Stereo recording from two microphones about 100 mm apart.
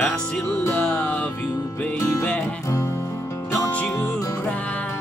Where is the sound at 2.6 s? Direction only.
30° left (ahead or behind).